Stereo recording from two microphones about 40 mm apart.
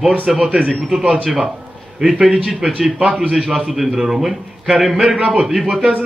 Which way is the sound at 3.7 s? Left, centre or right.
Centre.